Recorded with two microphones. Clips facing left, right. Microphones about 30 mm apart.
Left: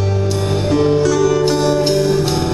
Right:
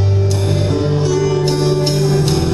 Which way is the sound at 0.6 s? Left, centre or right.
Left.